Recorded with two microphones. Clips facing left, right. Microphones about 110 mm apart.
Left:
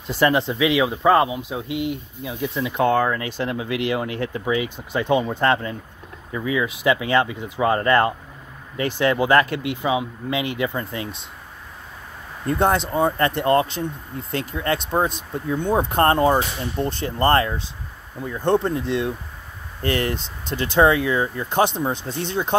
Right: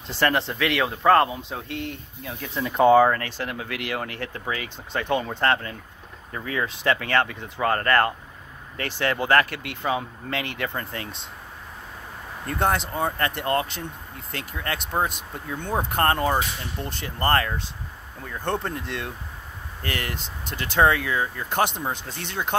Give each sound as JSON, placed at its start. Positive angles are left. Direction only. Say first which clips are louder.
{"t": 0.1, "sound": "speech", "louder": "left 4 dB", "side_deg": 15}
{"t": 2.5, "sound": "speech", "louder": "right 4 dB", "side_deg": 0}
{"t": 3.2, "sound": "speech", "louder": "left 5 dB", "side_deg": 15}
{"t": 12.4, "sound": "speech", "louder": "left 5 dB", "side_deg": 20}